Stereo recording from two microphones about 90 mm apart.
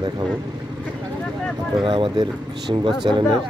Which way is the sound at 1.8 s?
65° right (ahead or behind).